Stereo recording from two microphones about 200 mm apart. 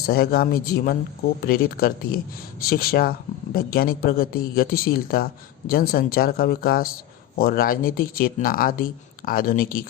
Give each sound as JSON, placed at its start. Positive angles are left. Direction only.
{"t": 0.1, "sound": "speech", "side_deg": 50}